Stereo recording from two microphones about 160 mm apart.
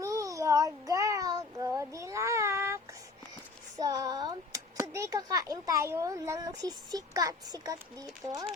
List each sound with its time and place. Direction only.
0.0 s child singing: 20° right (ahead or behind)
3.8 s a sound: 20° right (ahead or behind)
4.8 s speech: 15° right (ahead or behind)